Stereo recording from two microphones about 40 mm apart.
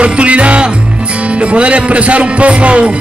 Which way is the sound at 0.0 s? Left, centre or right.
Right.